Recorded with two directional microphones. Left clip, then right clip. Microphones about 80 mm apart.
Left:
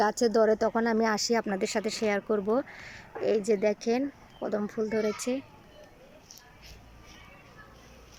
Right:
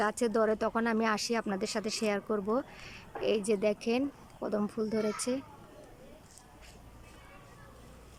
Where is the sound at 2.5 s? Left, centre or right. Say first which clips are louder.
Left 4 dB; centre.